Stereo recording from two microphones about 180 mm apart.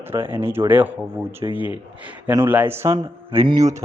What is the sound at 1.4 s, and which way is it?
Speech, 25° right (ahead or behind).